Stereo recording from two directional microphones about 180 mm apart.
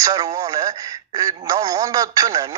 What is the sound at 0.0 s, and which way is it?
A man's voice, 20° right (ahead or behind).